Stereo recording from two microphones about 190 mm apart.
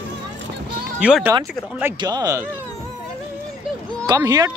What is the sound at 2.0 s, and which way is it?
Speech, 20° right (ahead or behind).